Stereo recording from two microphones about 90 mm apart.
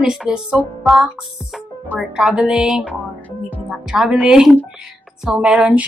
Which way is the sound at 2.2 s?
10° right (ahead or behind).